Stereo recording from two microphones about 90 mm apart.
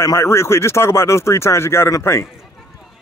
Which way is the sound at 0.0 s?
30° left (ahead or behind).